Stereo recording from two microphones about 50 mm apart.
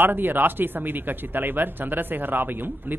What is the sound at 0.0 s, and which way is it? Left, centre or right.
Speech, right.